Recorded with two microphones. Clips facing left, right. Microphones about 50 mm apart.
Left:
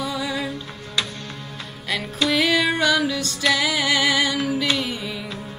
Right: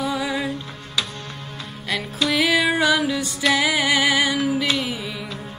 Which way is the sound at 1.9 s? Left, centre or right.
Centre.